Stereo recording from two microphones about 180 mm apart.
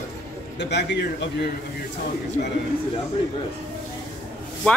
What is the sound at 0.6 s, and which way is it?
Speech, 70° left (ahead or behind).